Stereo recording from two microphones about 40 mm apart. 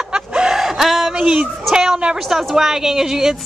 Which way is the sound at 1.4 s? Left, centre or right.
Centre.